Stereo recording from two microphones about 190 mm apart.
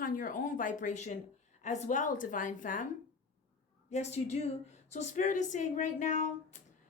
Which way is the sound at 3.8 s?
35° left (ahead or behind).